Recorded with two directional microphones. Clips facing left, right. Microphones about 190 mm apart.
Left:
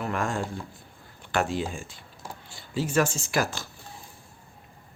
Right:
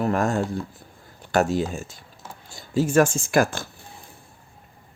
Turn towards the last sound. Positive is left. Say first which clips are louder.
# right 7 dB
turn(degrees=-50)  # may be behind; listen again after turning